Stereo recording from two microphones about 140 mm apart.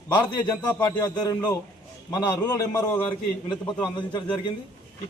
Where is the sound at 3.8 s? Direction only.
30° left (ahead or behind).